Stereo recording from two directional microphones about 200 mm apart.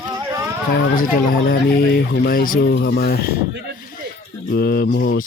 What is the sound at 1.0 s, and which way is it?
Speech, 50° left (ahead or behind).